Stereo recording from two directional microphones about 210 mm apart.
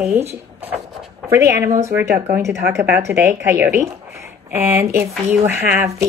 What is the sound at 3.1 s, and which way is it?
A woman's voice, 10° right (ahead or behind).